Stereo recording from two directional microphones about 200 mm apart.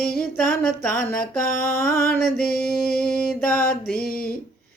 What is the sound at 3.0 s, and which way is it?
Mantra, 5° left (ahead or behind).